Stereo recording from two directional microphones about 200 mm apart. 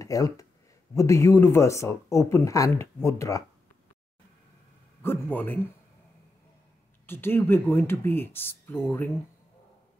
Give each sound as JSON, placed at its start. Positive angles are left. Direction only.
{"t": 0.0, "sound": "speech", "side_deg": 15}
{"t": 5.0, "sound": "speech", "side_deg": 10}
{"t": 7.1, "sound": "speech", "side_deg": 10}